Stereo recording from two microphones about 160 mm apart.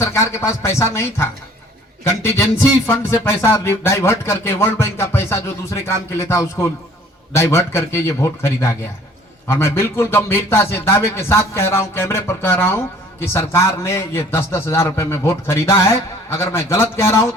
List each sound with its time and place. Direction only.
0.0 s speech: 15° left (ahead or behind)